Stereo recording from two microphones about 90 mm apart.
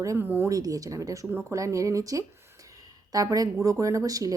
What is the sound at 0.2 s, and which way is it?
Speech, 25° right (ahead or behind).